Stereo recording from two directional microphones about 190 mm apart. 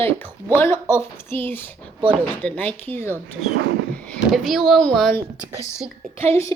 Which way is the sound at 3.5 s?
65° right (ahead or behind).